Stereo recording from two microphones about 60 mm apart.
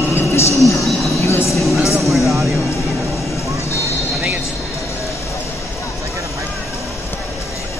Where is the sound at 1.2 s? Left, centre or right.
Left.